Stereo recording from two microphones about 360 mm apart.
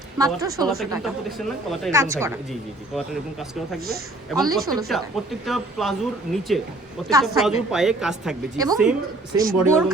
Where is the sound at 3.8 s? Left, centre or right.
Right.